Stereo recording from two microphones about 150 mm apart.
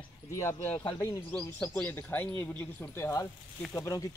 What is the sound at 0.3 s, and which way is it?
Speech, 20° left (ahead or behind).